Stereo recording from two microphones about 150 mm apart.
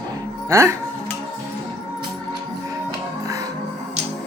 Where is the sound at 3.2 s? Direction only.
20° right (ahead or behind).